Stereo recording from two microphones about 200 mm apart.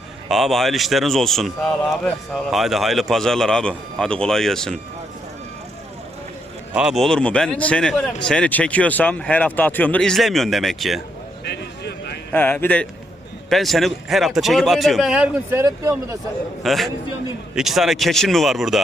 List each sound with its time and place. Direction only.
0.3 s speech: centre (ahead or behind)
6.7 s speech: centre (ahead or behind)
11.4 s a sound: 55° left (ahead or behind)
12.3 s speech: 10° left (ahead or behind); by 16.1 s 15° right (ahead or behind)
16.6 s speech: centre (ahead or behind)